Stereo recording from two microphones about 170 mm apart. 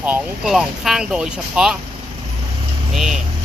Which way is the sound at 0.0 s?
5° right (ahead or behind).